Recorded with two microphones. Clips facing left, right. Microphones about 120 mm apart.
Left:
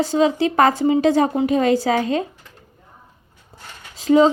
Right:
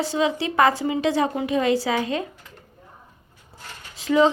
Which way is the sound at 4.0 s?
35° left (ahead or behind).